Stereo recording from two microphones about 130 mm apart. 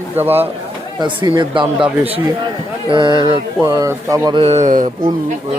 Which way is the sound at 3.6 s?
25° right (ahead or behind).